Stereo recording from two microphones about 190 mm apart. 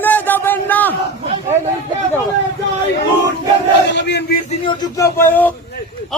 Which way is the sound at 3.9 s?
65° left (ahead or behind).